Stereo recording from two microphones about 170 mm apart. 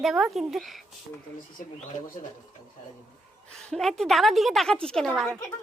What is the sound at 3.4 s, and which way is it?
A woman's voice, 5° left (ahead or behind).